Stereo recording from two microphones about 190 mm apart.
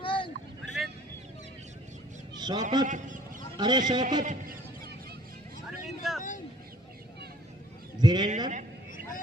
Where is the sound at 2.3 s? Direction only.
20° right (ahead or behind).